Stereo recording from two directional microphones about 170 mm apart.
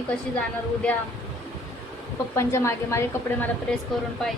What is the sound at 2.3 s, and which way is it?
A woman's voice, 15° left (ahead or behind).